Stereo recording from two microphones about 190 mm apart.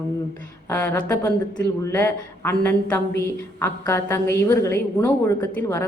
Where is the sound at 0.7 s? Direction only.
10° left (ahead or behind).